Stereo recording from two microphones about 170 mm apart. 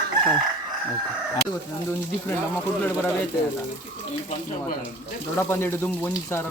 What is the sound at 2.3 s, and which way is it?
Speech, 10° left (ahead or behind).